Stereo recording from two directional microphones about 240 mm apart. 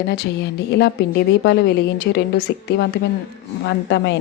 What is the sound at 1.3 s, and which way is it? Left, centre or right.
A woman's voice, left.